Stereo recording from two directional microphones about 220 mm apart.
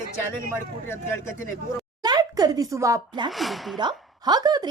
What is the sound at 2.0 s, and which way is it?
Speech, 15° right (ahead or behind).